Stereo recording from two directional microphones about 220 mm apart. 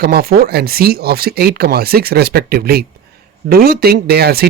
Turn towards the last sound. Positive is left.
turn(degrees=-45)  # may be behind; listen again after turning